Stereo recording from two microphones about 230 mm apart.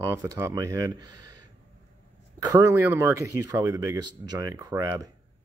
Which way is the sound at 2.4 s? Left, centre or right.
Centre.